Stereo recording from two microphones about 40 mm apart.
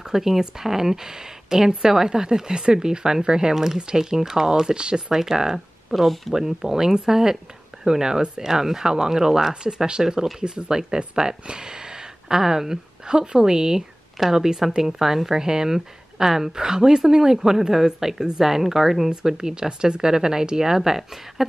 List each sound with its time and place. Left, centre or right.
0.0 s speech: centre
5.9 s speech: centre
6.3 s speech: centre